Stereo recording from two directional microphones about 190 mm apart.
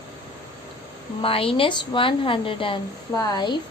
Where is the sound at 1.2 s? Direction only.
30° left (ahead or behind).